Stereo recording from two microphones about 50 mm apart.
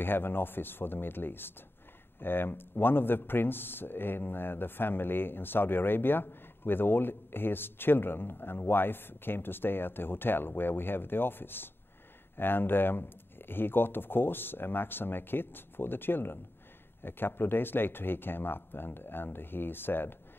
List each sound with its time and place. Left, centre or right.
0.0 s speech: left